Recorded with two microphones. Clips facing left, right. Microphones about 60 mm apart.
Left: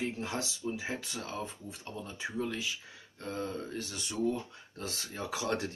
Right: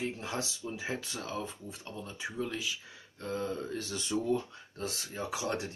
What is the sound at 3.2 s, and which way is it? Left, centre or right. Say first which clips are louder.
Speech: right 2 dB; left.